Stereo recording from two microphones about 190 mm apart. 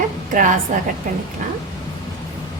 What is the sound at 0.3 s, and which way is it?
Speech, 45° right (ahead or behind).